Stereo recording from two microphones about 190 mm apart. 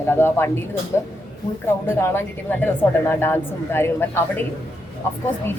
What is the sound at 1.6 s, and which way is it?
Speech, 15° left (ahead or behind).